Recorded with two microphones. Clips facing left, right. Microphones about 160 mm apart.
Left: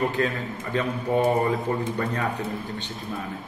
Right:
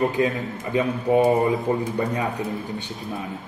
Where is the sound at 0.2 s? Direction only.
15° right (ahead or behind).